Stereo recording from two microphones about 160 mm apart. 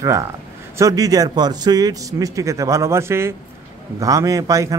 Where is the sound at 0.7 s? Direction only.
20° right (ahead or behind).